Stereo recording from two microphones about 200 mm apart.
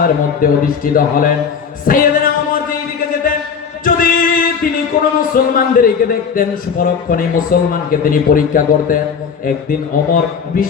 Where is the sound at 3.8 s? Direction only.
45° left (ahead or behind).